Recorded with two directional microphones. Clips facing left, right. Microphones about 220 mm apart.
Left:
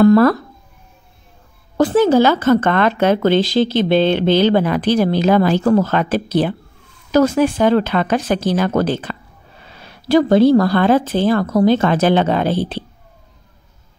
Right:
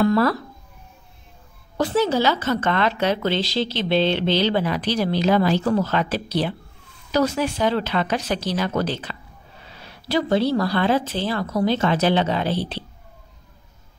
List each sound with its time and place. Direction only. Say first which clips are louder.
0.0 s speech: left 8 dB; 50° left (ahead or behind)
1.8 s speech: left 8 dB; 50° left (ahead or behind)